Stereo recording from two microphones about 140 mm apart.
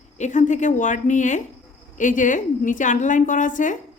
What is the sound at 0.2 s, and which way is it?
A woman's voice, 60° left (ahead or behind).